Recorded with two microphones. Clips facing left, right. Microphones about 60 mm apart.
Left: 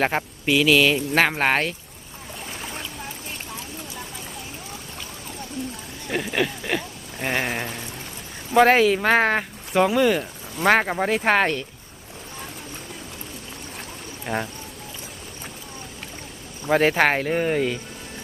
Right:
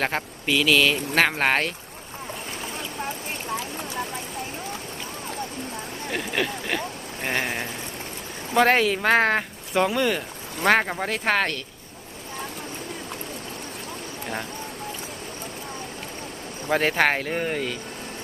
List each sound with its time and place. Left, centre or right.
0.0 s speech: centre
3.6 s a sound: right
6.1 s speech: centre
7.3 s a sound: centre
8.5 s speech: centre
16.6 s speech: centre